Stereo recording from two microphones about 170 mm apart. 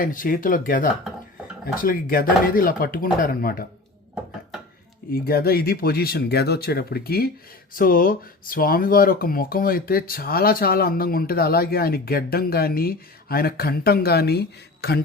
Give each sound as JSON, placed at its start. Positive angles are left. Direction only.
{"t": 0.0, "sound": "speech", "side_deg": 55}
{"t": 5.1, "sound": "speech", "side_deg": 60}